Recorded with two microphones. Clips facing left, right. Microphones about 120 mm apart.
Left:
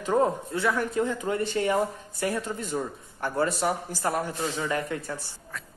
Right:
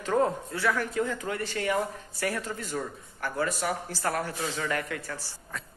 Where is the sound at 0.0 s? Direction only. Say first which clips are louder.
Left 2 dB; 20° left (ahead or behind).